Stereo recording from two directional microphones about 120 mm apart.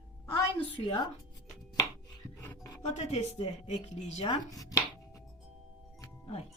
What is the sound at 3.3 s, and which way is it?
Speech, 60° left (ahead or behind).